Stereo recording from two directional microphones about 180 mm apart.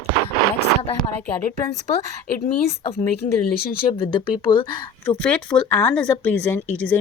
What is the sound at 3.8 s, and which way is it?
Speech, 30° left (ahead or behind).